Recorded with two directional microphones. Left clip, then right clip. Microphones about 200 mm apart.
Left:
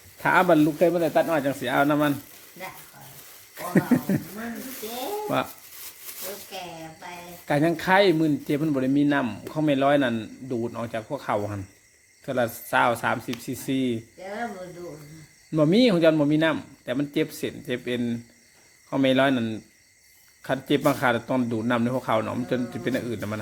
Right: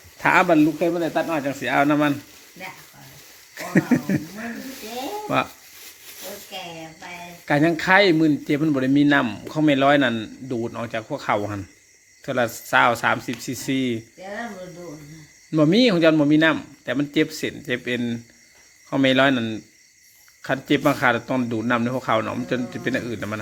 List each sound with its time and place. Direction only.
0.2 s speech: centre (ahead or behind)
0.4 s speech: 15° left (ahead or behind)
1.6 s speech: 5° left (ahead or behind)
3.6 s speech: centre (ahead or behind)
7.4 s speech: centre (ahead or behind)
15.5 s speech: centre (ahead or behind)